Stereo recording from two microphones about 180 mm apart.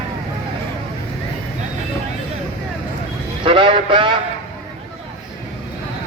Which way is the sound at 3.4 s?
30° right (ahead or behind).